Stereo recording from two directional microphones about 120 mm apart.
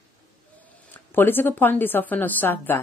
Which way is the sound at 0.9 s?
15° left (ahead or behind).